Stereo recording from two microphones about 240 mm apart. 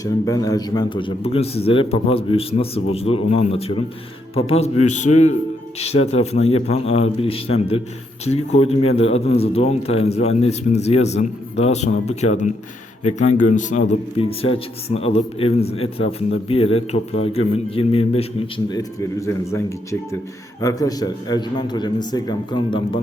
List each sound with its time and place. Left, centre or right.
0.0 s a man's voice: centre